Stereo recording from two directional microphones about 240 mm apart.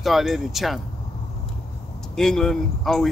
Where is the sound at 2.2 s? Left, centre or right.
Centre.